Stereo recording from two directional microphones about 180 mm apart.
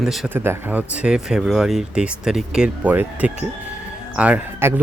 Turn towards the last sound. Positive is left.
turn(degrees=-15)  # may be behind; listen again after turning